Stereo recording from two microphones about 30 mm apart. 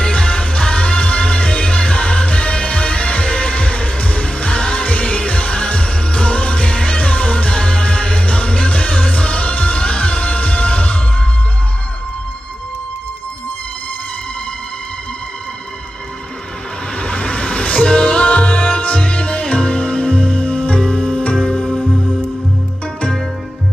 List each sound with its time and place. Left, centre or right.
0.0 s music: left
17.0 s music: left
21.7 s music: centre